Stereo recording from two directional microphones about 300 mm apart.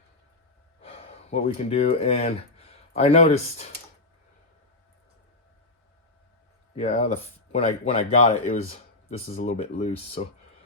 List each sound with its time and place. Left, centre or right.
0.8 s speech: centre
6.7 s speech: left